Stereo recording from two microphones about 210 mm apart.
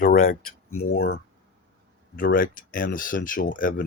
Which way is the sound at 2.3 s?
40° left (ahead or behind).